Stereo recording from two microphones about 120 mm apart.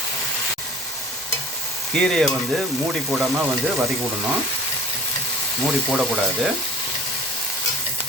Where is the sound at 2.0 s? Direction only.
5° left (ahead or behind).